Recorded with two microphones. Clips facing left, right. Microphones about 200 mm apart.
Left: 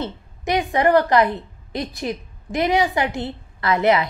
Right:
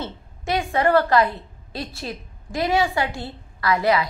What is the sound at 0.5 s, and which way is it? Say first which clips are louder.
A woman's voice: left 2 dB; 20° left (ahead or behind).